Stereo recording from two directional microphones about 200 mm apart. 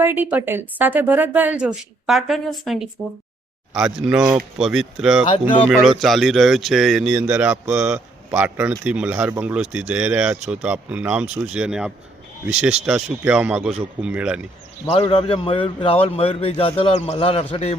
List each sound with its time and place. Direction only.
0.0 s a woman's voice: 10° right (ahead or behind)
14.8 s speech: 25° left (ahead or behind)